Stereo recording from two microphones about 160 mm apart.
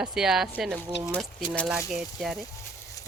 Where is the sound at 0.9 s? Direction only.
90° left.